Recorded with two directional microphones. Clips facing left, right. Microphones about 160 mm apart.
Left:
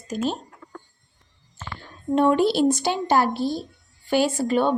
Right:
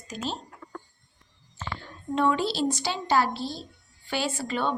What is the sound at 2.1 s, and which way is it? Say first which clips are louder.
A woman's voice: left 7 dB; 50° left (ahead or behind).